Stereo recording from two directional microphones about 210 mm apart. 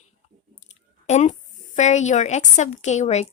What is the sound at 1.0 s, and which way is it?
A woman's voice, 35° left (ahead or behind).